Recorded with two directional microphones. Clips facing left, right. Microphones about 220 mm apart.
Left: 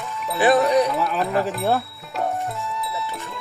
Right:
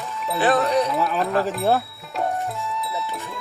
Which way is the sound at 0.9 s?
Centre (ahead or behind).